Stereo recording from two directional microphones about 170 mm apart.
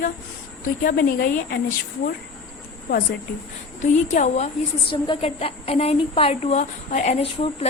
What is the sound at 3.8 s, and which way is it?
A woman's voice, 45° left (ahead or behind).